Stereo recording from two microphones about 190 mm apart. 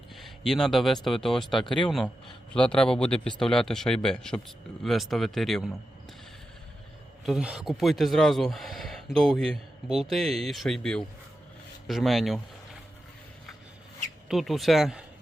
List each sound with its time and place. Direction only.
0.1 s a sound: centre (ahead or behind)
1.0 s speech: centre (ahead or behind)
7.3 s speech: centre (ahead or behind)
14.3 s speech: centre (ahead or behind)